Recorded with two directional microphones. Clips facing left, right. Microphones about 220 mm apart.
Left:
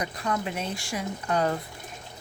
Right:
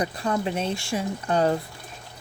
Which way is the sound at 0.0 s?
30° right (ahead or behind).